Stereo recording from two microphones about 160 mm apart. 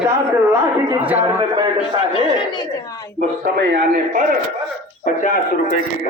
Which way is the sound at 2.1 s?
25° left (ahead or behind).